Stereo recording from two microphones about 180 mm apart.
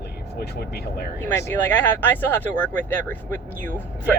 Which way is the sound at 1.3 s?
10° left (ahead or behind).